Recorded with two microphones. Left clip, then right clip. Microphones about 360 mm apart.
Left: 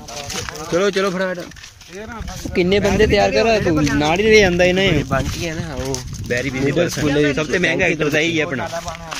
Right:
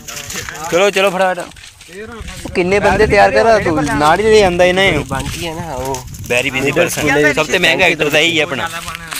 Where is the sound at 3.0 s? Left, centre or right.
Right.